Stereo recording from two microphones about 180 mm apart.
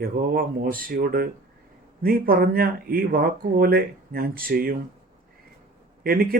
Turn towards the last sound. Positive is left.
turn(degrees=-55)  # may be behind; listen again after turning